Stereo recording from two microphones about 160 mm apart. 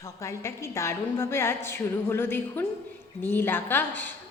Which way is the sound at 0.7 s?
20° left (ahead or behind).